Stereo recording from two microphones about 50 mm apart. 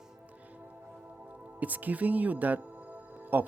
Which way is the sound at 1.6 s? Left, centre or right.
Right.